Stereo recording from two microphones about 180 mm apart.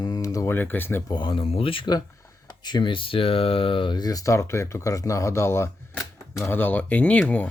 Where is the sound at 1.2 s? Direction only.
30° left (ahead or behind); by 7.5 s 5° left (ahead or behind).